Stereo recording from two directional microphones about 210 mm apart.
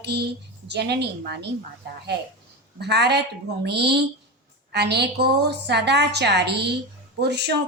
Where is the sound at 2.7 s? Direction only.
50° right (ahead or behind).